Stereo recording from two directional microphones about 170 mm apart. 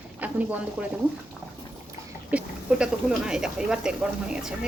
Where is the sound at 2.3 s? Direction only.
5° right (ahead or behind).